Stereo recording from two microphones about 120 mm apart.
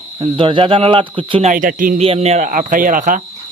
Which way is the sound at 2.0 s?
60° right (ahead or behind).